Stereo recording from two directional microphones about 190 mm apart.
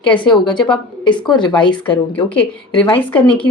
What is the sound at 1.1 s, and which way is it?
Speech, 5° left (ahead or behind).